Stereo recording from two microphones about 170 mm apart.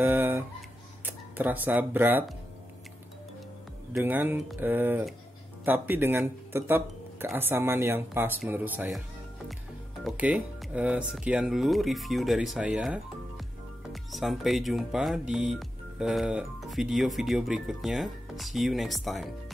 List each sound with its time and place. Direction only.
0.0 s music: 10° right (ahead or behind)
1.0 s speech: 10° right (ahead or behind)
4.0 s speech: 10° right (ahead or behind)
10.0 s speech: 5° right (ahead or behind)
14.1 s speech: centre (ahead or behind)